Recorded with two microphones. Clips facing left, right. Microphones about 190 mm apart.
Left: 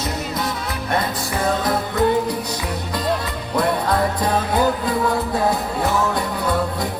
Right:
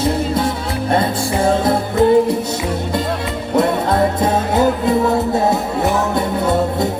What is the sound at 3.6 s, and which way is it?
Music, 25° right (ahead or behind).